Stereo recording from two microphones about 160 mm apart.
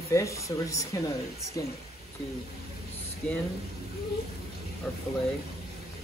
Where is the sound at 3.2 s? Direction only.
5° left (ahead or behind).